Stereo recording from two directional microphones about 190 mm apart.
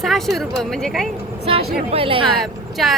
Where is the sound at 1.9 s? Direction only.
30° right (ahead or behind).